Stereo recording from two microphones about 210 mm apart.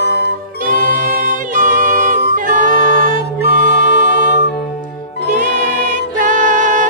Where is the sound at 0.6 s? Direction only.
40° right (ahead or behind).